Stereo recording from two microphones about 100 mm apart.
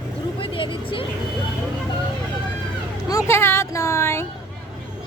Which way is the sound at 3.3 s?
25° left (ahead or behind).